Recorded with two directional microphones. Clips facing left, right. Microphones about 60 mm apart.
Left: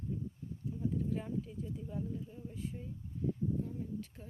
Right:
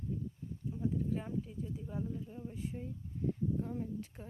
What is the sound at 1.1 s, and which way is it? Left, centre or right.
Speech, centre.